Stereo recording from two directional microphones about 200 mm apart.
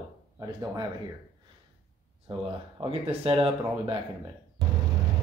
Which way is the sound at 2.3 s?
25° right (ahead or behind).